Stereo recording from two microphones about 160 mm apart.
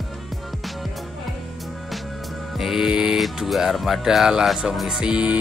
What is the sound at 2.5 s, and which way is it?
Speech, centre (ahead or behind).